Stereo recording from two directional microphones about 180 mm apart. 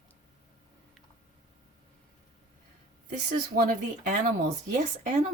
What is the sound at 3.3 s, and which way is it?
Speech, 50° right (ahead or behind).